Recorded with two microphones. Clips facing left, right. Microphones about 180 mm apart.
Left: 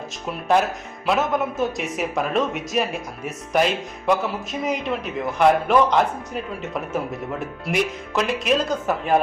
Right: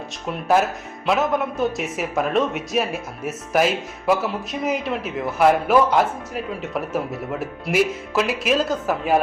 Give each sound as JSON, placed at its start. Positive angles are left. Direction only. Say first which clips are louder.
{"t": 0.3, "sound": "a man's voice", "louder": "right 1 dB", "side_deg": 0}